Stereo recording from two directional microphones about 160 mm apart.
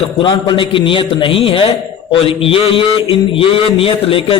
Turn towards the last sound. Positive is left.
turn(degrees=35)  # may be behind; listen again after turning